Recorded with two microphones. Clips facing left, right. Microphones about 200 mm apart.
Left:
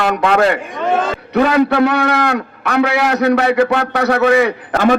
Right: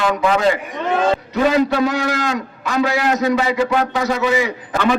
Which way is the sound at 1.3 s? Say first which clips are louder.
Left 6 dB; 65° left (ahead or behind).